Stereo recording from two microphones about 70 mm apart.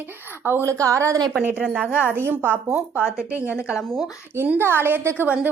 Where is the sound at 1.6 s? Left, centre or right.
Centre.